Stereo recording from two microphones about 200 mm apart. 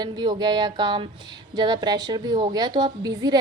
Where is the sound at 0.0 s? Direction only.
20° right (ahead or behind).